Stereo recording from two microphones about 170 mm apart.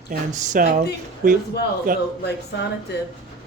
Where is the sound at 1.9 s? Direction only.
55° right (ahead or behind).